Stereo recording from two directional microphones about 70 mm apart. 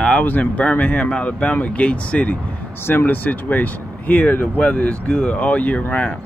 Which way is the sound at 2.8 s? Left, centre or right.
Left.